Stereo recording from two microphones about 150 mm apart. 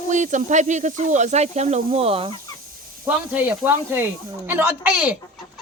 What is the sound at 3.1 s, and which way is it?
Speech, 10° right (ahead or behind).